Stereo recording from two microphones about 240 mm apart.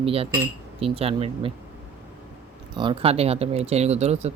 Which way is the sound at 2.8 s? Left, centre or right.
Right.